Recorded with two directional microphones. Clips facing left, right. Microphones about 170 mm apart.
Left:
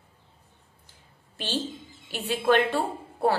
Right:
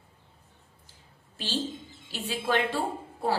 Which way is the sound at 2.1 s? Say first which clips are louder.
Left 5 dB; 60° left (ahead or behind).